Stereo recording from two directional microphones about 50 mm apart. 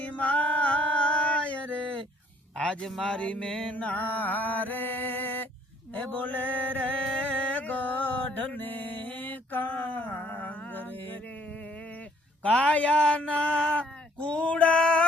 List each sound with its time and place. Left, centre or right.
0.0 s a sound: left
2.8 s music: centre
3.8 s mantra: left
7.2 s music: left
12.5 s speech: left
13.7 s a sound: left